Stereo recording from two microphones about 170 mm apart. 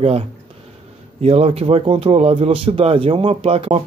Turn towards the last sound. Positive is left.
turn(degrees=-35)  # may be behind; listen again after turning